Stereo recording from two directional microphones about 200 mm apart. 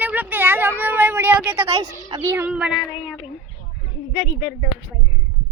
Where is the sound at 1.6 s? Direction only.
25° right (ahead or behind); by 2.8 s 5° right (ahead or behind).